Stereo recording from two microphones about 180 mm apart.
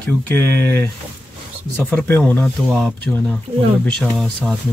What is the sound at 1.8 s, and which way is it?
Speech, 10° left (ahead or behind).